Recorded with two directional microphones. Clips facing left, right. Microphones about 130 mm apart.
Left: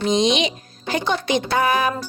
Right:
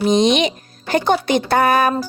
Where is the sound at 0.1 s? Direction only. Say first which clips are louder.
Right 3 dB; 55° right (ahead or behind).